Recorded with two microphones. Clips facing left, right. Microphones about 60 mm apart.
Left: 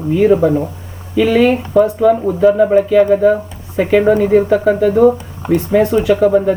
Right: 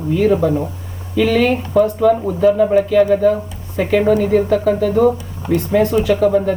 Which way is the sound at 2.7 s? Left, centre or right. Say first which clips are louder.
Left 2 dB; left.